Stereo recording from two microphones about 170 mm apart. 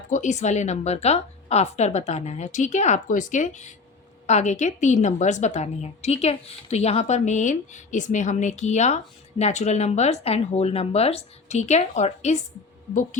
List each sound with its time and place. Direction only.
0.1 s a woman's voice: 45° left (ahead or behind)